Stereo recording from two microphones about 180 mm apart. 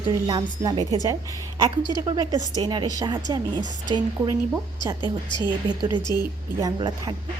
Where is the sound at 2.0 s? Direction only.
25° right (ahead or behind).